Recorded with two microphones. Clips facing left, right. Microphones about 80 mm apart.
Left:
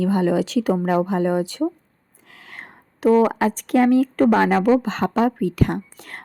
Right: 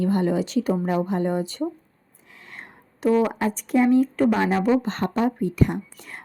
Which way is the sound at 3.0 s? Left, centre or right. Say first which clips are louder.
Left 4 dB; left.